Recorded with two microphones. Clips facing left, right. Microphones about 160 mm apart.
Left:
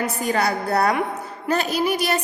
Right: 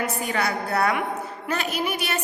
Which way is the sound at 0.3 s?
35° left (ahead or behind).